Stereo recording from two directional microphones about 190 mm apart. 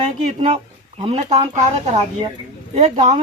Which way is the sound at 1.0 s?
35° right (ahead or behind).